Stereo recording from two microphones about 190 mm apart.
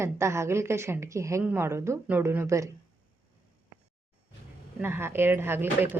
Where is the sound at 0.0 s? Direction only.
15° right (ahead or behind).